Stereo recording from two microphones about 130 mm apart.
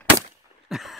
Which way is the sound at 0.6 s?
Centre (ahead or behind).